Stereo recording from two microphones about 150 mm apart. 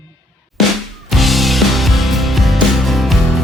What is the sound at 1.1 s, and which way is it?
Music, centre (ahead or behind).